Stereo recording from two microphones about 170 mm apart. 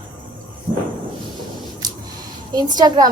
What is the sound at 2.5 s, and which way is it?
Speech, 25° right (ahead or behind).